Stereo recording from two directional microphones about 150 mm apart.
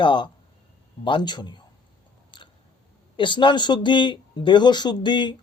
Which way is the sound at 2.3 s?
30° left (ahead or behind).